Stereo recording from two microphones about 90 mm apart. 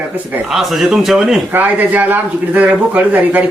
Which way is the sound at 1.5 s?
20° right (ahead or behind).